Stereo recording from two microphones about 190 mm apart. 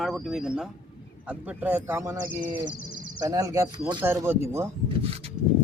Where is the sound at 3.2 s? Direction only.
20° right (ahead or behind).